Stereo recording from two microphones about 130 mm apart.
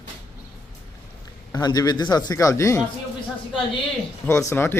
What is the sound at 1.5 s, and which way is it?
A man's voice, 30° left (ahead or behind).